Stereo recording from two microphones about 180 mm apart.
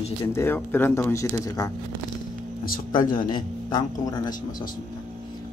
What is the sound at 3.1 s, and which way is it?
Speech, 25° left (ahead or behind).